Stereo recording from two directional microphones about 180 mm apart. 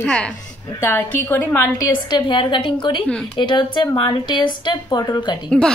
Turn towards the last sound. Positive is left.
turn(degrees=25)  # may be behind; listen again after turning